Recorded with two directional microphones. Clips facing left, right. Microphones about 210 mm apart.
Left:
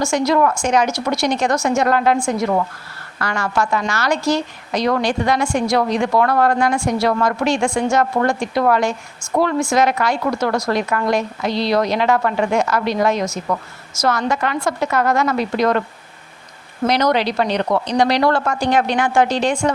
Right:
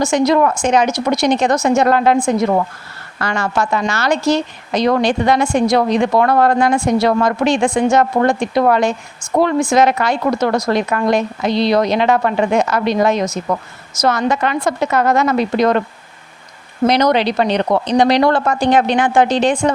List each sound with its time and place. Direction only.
0.0 s a woman's voice: 20° right (ahead or behind)
16.8 s a woman's voice: 20° right (ahead or behind)